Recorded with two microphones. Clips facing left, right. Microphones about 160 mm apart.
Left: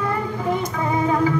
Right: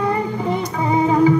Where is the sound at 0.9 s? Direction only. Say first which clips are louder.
Right 5 dB; 25° right (ahead or behind).